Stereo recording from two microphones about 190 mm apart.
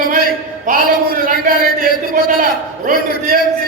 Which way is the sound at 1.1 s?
50° right (ahead or behind).